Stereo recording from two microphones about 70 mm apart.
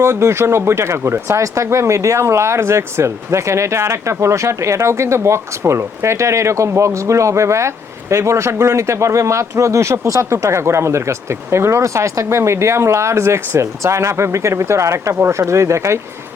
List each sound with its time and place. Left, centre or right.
0.0 s speech: right